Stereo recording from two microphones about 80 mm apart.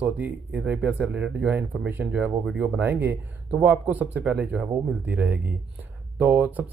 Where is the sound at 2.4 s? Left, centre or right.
Centre.